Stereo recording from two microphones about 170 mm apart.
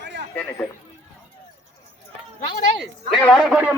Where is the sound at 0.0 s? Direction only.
90° right.